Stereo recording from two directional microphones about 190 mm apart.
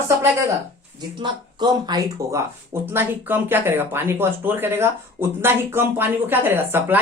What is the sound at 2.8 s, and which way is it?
Speech, 10° right (ahead or behind).